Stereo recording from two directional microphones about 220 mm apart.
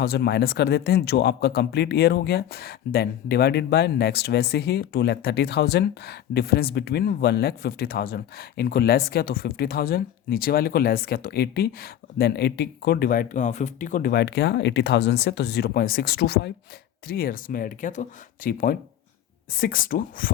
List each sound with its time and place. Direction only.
0.0 s speech: 45° left (ahead or behind)